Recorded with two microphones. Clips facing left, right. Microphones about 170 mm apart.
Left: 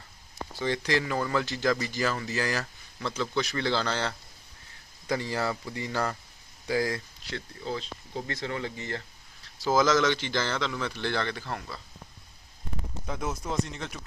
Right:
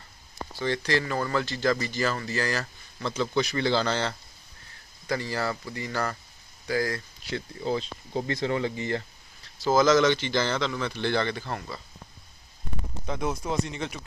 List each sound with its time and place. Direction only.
0.6 s speech: 15° left (ahead or behind)
3.2 s a man's voice: 5° right (ahead or behind)
5.1 s speech: 20° left (ahead or behind)
7.3 s speech: 15° right (ahead or behind)
9.7 s a man's voice: 5° left (ahead or behind)
13.1 s a man's voice: centre (ahead or behind)